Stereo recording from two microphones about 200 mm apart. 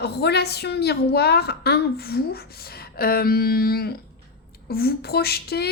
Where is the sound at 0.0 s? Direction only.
55° left (ahead or behind).